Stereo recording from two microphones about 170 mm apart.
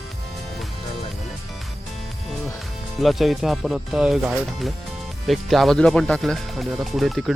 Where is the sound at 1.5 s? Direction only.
Centre (ahead or behind).